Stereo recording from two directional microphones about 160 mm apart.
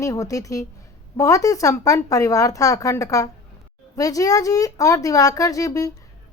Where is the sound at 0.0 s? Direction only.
20° left (ahead or behind).